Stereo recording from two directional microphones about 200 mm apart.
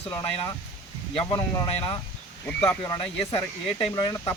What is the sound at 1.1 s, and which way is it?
Speech, 25° left (ahead or behind).